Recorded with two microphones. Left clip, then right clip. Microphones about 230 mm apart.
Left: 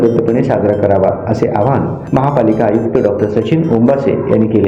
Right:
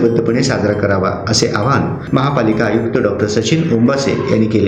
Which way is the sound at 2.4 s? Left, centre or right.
Centre.